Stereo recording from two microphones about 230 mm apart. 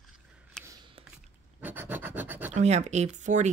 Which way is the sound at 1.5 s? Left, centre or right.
Centre.